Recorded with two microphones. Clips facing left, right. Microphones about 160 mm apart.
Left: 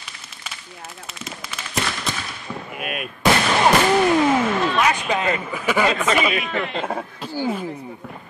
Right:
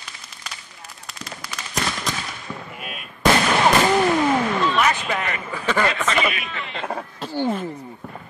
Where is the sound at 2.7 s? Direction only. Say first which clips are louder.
Left 7 dB; 70° left (ahead or behind).